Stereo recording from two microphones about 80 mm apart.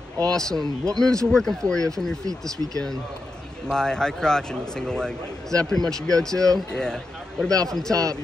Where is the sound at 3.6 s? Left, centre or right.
Centre.